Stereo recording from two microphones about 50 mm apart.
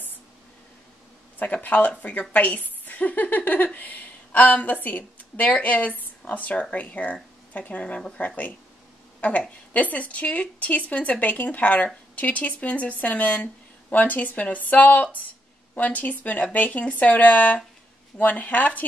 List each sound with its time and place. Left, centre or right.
1.4 s a woman's voice: left